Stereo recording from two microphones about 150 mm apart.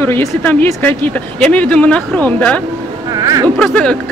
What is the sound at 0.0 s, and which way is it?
Speech, 15° left (ahead or behind).